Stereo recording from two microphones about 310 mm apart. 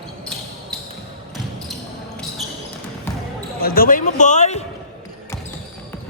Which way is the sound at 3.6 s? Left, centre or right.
Left.